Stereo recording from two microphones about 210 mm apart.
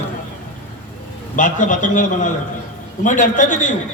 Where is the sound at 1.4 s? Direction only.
40° left (ahead or behind).